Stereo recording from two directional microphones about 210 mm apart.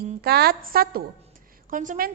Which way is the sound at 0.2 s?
50° right (ahead or behind).